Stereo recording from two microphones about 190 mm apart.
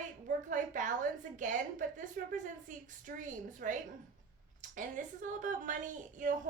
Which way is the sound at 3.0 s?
45° right (ahead or behind).